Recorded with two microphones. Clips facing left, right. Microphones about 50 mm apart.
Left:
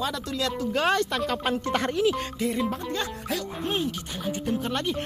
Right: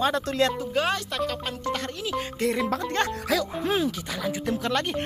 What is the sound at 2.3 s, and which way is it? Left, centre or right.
Music, right.